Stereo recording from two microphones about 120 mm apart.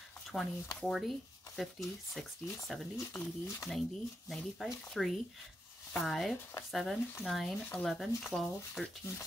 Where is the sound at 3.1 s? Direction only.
10° left (ahead or behind).